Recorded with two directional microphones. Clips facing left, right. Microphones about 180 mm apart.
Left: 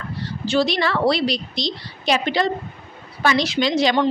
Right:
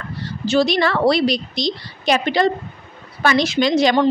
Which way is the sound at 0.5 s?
45° right (ahead or behind).